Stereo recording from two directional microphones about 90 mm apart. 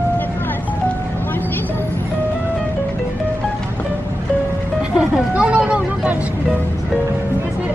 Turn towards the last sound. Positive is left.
turn(degrees=-15)  # may be behind; listen again after turning